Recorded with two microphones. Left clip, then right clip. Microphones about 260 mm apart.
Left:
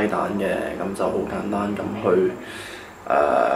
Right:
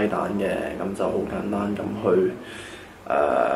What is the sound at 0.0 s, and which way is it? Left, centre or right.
Speech, centre.